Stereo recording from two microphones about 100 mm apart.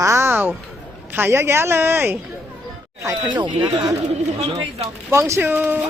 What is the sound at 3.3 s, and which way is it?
Speech, 50° right (ahead or behind).